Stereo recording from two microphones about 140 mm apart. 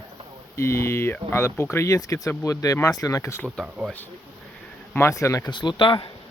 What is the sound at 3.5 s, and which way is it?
Speech, 5° right (ahead or behind).